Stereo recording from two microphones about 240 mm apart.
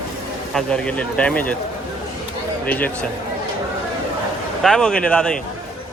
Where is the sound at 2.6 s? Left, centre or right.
Centre.